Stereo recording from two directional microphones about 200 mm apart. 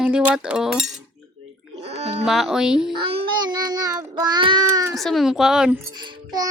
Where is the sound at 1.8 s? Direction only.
30° right (ahead or behind).